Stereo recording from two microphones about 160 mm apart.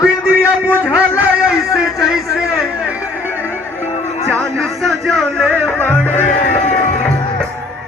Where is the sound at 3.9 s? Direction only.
45° left (ahead or behind).